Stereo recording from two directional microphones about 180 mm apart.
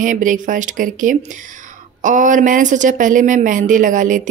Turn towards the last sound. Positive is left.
turn(degrees=-45)  # may be behind; listen again after turning